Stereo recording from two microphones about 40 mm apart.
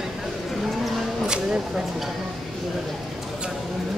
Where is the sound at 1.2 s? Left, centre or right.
Centre.